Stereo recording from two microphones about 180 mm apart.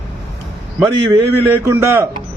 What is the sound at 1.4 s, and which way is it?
Speech, 15° right (ahead or behind).